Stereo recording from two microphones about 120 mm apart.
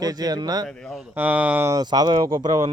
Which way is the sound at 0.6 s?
5° left (ahead or behind).